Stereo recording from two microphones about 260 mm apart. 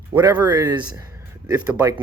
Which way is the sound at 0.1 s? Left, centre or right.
Centre.